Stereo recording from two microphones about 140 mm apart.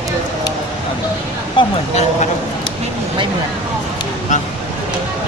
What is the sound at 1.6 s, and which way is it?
Speech, 35° left (ahead or behind).